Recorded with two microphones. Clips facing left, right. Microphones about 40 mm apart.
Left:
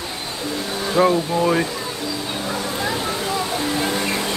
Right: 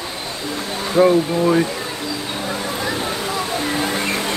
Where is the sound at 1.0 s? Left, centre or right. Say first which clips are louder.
Right 3 dB; left.